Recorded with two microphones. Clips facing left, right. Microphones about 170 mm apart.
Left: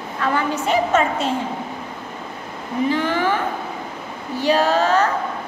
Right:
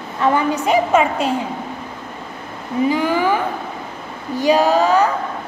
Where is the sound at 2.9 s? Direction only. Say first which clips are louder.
Right 2 dB; 10° right (ahead or behind).